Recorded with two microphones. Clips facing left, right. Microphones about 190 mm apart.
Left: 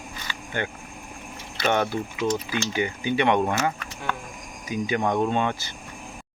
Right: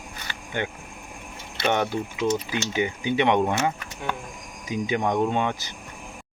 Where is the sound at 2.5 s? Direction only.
20° right (ahead or behind).